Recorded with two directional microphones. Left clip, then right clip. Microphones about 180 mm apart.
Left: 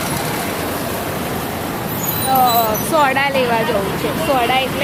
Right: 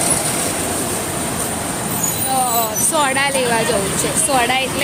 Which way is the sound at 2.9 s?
5° right (ahead or behind).